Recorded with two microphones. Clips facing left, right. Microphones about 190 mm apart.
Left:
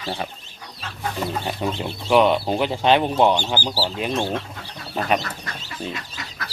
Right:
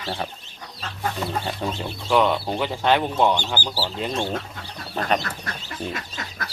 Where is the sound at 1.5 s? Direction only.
20° left (ahead or behind).